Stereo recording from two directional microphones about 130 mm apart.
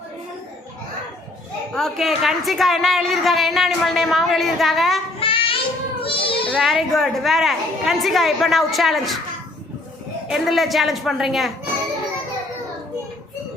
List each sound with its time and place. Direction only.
1.7 s a woman's voice: centre (ahead or behind)
5.2 s child singing: 45° left (ahead or behind)
6.1 s a sound: 45° left (ahead or behind)
6.5 s a woman's voice: centre (ahead or behind)
10.2 s a woman's voice: centre (ahead or behind)